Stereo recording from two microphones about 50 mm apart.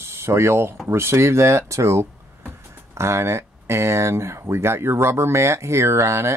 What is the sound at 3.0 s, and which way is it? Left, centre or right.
Speech, right.